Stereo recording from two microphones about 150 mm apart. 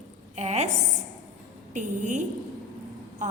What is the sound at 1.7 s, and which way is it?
A woman's voice, 55° right (ahead or behind).